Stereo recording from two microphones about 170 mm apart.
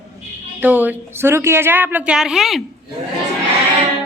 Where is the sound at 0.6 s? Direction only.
10° right (ahead or behind).